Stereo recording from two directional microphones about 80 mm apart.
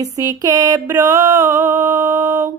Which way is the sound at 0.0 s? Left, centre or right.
Right.